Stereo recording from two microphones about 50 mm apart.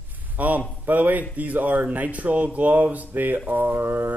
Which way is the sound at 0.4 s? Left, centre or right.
Right.